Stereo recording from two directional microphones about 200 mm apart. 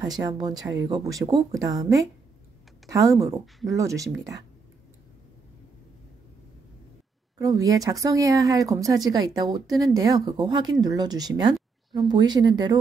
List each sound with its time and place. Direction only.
0.0 s speech: 20° right (ahead or behind)
7.3 s speech: 15° right (ahead or behind)